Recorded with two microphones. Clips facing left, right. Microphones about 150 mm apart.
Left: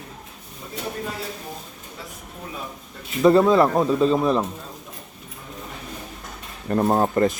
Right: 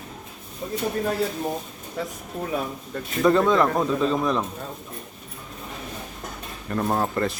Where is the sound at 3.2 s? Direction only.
25° left (ahead or behind).